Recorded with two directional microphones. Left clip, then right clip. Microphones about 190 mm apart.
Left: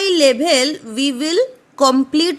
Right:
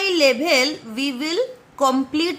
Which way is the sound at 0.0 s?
35° left (ahead or behind).